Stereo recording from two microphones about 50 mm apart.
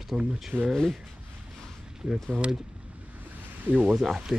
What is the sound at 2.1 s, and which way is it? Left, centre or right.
Speech, centre.